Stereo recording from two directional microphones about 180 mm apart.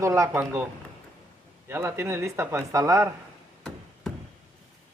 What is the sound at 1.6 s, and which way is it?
Speech, 15° right (ahead or behind).